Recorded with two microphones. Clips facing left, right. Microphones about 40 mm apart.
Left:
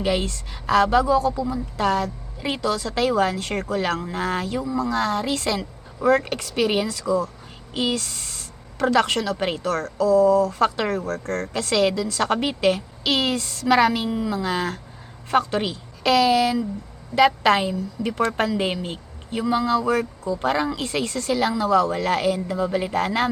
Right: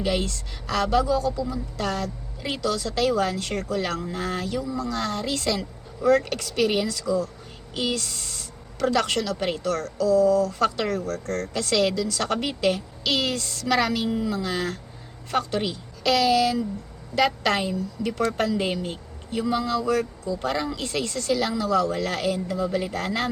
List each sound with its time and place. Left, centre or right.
0.0 s a woman's voice: left